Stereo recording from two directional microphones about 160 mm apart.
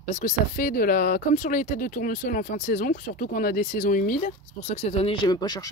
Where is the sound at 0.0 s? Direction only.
50° left (ahead or behind).